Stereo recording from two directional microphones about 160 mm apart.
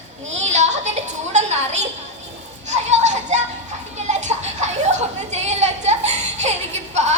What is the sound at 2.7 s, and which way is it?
Children playing, 45° right (ahead or behind).